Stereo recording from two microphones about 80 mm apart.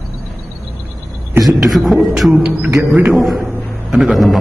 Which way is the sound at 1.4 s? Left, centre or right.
Centre.